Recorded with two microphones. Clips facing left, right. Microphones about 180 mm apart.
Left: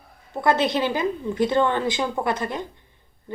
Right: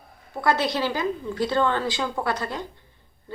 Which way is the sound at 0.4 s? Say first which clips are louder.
Left 2 dB; 20° left (ahead or behind).